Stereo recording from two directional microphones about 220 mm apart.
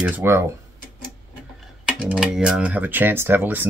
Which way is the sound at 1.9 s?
5° right (ahead or behind).